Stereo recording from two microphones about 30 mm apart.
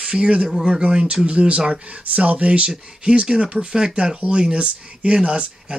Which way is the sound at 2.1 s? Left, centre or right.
Right.